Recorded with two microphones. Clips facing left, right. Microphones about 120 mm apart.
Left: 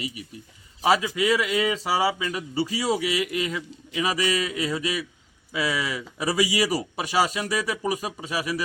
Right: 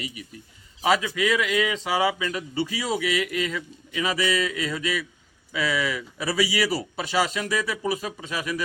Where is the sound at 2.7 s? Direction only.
40° left (ahead or behind).